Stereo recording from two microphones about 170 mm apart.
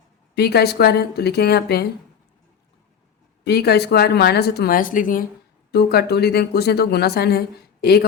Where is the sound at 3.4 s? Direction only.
70° left (ahead or behind); by 5.3 s 55° left (ahead or behind).